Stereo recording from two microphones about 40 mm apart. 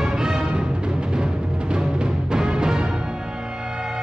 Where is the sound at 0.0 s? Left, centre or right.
Centre.